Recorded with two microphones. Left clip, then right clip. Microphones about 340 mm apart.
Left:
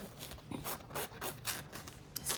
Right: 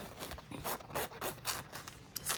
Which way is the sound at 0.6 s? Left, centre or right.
Centre.